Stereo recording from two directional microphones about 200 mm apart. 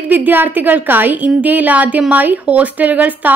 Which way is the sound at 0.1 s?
10° right (ahead or behind).